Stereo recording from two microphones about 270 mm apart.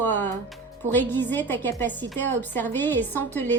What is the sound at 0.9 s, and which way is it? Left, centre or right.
A woman's voice, centre.